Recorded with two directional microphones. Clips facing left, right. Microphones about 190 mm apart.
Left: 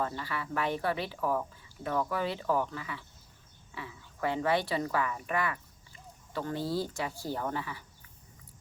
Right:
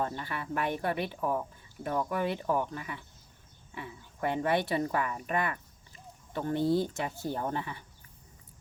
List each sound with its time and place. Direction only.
0.0 s speech: 20° right (ahead or behind)
4.3 s speech: 20° right (ahead or behind)